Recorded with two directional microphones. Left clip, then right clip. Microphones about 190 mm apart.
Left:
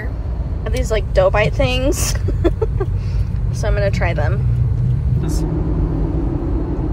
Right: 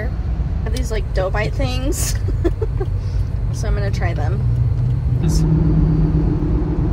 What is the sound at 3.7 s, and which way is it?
Speech, 10° right (ahead or behind).